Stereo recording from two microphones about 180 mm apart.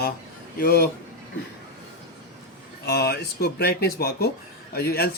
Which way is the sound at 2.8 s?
60° left (ahead or behind).